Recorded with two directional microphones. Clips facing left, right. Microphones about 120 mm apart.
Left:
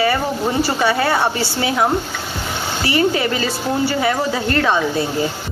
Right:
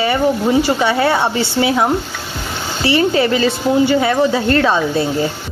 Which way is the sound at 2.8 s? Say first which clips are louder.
Right 4 dB; 30° right (ahead or behind).